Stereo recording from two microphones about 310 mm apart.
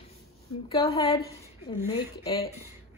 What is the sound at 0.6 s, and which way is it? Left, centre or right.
Speech, centre.